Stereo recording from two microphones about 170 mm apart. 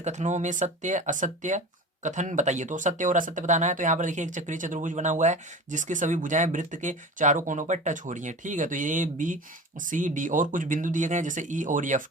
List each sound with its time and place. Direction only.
0.0 s speech: 45° right (ahead or behind)